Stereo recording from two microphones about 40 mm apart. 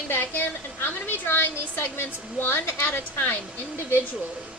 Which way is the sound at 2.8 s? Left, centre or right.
Left.